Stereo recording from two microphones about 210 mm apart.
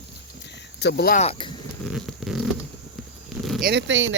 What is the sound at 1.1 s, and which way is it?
Speech, 30° left (ahead or behind).